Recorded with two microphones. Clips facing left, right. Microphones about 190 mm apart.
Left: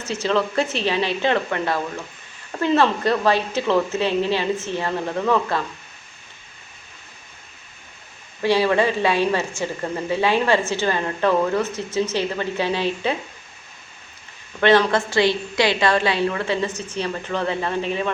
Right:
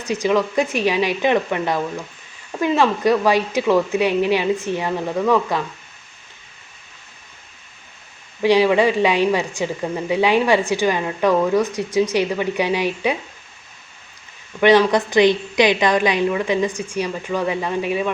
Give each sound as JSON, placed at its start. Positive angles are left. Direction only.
{"t": 0.0, "sound": "a woman's voice", "side_deg": -15}
{"t": 8.4, "sound": "a woman's voice", "side_deg": -15}
{"t": 14.6, "sound": "a woman's voice", "side_deg": -15}